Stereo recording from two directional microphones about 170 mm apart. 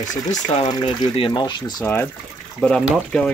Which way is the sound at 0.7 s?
30° left (ahead or behind).